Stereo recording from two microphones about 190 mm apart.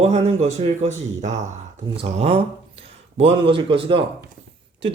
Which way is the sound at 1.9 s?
30° right (ahead or behind).